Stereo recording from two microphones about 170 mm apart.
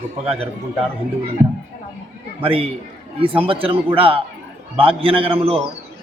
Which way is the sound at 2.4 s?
35° right (ahead or behind).